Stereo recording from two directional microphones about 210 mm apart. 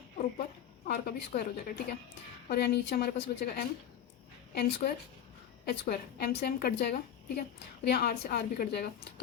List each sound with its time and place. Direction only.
0.9 s a woman's voice: 45° left (ahead or behind)